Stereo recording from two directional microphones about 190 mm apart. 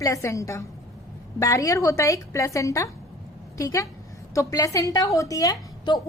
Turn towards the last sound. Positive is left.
turn(degrees=20)  # may be behind; listen again after turning